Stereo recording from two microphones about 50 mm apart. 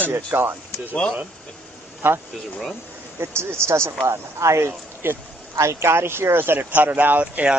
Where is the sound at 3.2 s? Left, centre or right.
Right.